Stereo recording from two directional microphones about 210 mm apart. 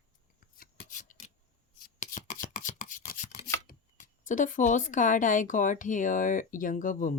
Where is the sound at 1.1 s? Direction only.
40° left (ahead or behind).